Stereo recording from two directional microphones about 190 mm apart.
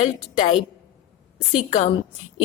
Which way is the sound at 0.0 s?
35° left (ahead or behind).